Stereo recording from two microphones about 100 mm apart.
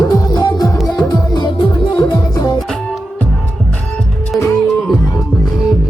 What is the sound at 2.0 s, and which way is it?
Music, 35° left (ahead or behind).